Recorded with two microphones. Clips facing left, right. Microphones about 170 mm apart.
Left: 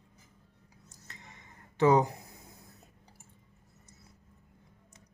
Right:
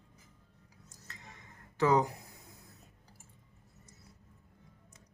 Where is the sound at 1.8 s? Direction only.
25° left (ahead or behind).